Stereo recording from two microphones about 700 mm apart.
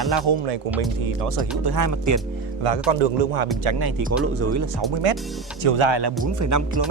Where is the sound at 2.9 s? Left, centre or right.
Right.